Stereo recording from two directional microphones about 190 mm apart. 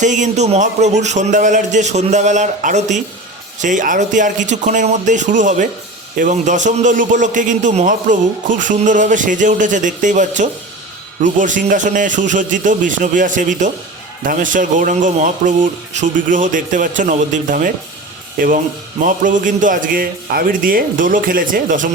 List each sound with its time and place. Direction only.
0.0 s a man's voice: 40° right (ahead or behind)